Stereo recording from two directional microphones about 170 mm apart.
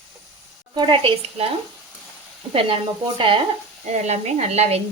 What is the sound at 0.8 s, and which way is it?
Speech, 30° right (ahead or behind).